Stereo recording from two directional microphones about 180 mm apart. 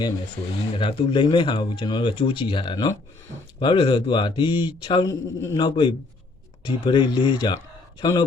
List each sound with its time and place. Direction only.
0.7 s speech: 30° left (ahead or behind)
5.5 s speech: 25° left (ahead or behind)